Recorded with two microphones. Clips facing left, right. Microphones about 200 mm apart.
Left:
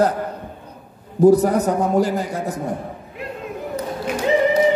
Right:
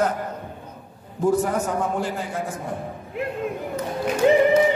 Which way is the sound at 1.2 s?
35° left (ahead or behind).